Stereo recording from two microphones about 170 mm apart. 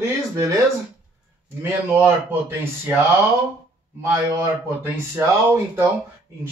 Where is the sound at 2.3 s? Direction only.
10° right (ahead or behind).